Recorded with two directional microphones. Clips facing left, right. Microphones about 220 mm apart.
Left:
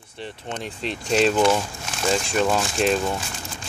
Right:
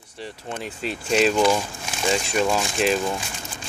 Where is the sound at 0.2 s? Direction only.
5° right (ahead or behind).